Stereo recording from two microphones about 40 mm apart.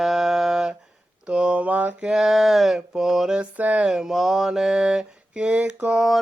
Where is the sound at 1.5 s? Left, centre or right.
Right.